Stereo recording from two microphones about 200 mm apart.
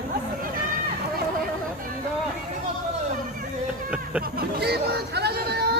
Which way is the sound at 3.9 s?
5° right (ahead or behind).